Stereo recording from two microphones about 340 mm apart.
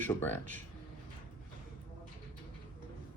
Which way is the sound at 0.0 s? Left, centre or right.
Centre.